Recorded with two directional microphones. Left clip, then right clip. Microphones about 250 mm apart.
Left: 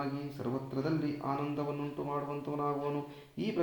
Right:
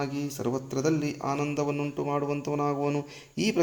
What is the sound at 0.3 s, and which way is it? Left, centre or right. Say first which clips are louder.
Speech: right 8 dB; right.